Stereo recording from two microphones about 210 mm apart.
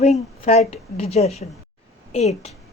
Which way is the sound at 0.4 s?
30° left (ahead or behind).